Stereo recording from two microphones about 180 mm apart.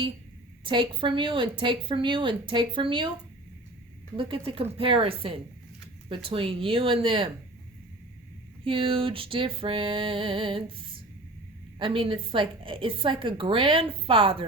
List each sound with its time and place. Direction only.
0.6 s a woman's voice: 30° right (ahead or behind)
4.2 s a woman's voice: 30° right (ahead or behind)
8.6 s a woman's voice: 30° right (ahead or behind)
11.8 s a woman's voice: 30° right (ahead or behind)